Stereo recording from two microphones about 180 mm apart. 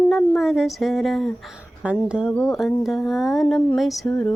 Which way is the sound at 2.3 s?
15° left (ahead or behind).